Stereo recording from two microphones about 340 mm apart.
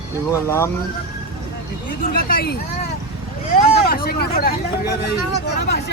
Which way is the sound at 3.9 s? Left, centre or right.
Left.